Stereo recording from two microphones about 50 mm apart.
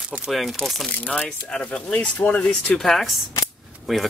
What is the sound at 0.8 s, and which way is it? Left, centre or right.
Speech, left.